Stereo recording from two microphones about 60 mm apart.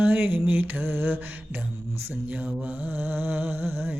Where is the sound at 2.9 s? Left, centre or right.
Right.